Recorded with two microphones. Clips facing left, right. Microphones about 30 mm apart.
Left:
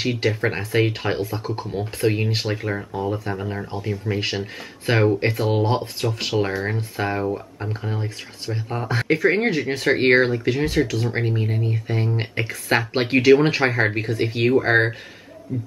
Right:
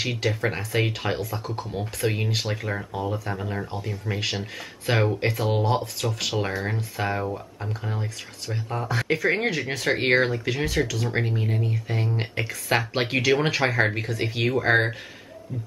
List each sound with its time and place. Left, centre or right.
0.3 s speech: centre
1.4 s speech: left
2.0 s speech: centre
5.7 s speech: left
6.0 s speech: centre